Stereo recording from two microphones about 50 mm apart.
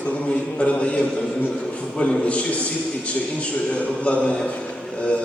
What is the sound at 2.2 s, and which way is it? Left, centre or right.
Speech, left.